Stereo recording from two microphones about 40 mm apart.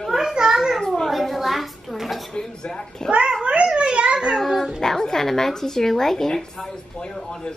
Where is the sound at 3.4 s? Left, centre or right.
Right.